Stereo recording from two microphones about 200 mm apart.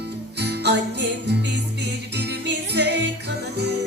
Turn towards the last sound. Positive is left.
turn(degrees=-55)  # may be behind; listen again after turning